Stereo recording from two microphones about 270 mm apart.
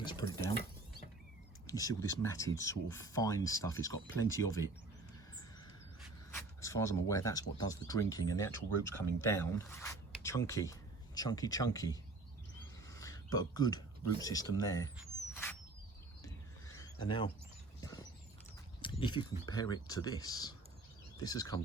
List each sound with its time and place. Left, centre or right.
0.0 s speech: centre
1.6 s speech: centre
6.6 s speech: centre
16.2 s a sound: centre
18.8 s speech: centre